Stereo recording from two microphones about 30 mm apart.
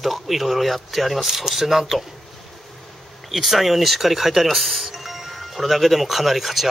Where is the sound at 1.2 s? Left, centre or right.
Centre.